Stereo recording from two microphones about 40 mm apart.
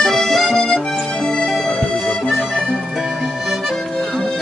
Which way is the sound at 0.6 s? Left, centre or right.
Centre.